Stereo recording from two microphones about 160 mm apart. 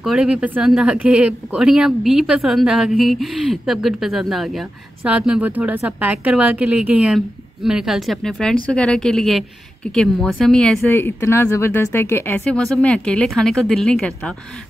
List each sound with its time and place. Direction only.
0.0 s speech: 5° right (ahead or behind)